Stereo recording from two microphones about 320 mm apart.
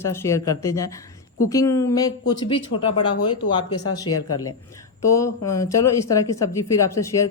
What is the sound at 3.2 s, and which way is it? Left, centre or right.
Speech, left.